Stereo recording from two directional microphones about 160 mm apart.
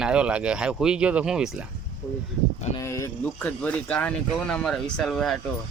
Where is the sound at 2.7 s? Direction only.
20° left (ahead or behind).